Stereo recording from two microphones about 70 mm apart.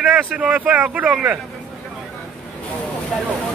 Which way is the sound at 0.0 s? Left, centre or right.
Centre.